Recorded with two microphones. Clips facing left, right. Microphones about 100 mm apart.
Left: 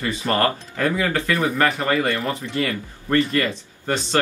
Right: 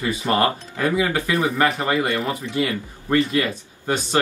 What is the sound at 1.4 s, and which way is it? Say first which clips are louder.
Speech: right 1 dB; centre (ahead or behind).